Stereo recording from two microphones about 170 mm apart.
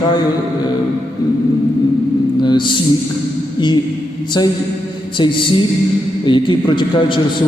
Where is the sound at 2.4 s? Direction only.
30° left (ahead or behind).